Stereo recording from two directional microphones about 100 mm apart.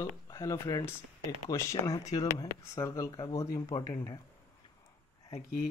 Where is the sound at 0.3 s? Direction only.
35° left (ahead or behind).